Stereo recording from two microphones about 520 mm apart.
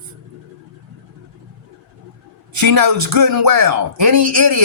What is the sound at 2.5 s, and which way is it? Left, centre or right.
Speech, right.